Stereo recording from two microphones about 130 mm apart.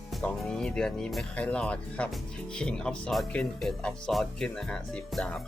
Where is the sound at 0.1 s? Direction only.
Centre (ahead or behind).